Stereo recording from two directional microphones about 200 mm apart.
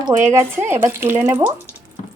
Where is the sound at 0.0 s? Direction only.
15° right (ahead or behind).